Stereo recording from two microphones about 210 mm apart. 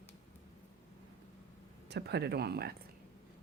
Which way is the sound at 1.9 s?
50° right (ahead or behind).